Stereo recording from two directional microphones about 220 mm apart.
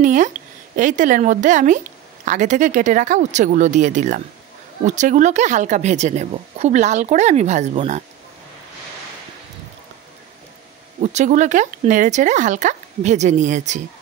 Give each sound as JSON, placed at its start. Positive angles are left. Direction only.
{"t": 0.0, "sound": "speech", "side_deg": -35}
{"t": 11.0, "sound": "speech", "side_deg": -35}